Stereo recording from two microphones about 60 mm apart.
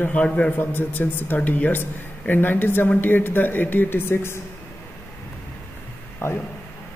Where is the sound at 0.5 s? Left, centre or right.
Left.